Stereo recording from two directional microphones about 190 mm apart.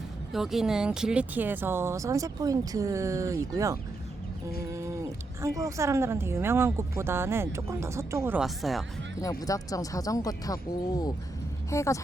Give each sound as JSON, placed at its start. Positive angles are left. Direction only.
{"t": 0.3, "sound": "speech", "side_deg": 0}
{"t": 9.4, "sound": "speech", "side_deg": 20}